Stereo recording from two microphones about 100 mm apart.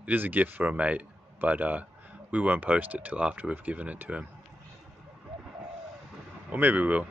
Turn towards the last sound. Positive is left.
turn(degrees=-15)  # may be behind; listen again after turning